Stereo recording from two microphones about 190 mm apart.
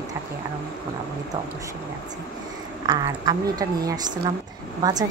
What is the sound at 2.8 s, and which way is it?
A woman's voice, 20° right (ahead or behind).